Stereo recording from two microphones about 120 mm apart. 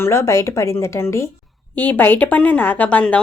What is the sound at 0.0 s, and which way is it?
Speech, 25° left (ahead or behind).